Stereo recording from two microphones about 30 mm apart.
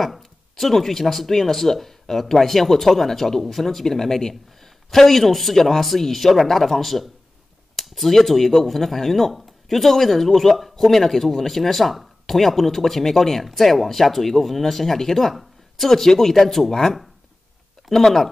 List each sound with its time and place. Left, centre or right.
0.0 s speech: centre